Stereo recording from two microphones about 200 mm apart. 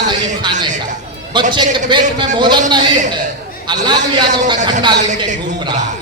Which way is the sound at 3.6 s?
20° right (ahead or behind).